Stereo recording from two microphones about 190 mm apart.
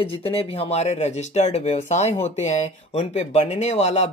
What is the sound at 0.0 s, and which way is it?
Speech, 30° left (ahead or behind).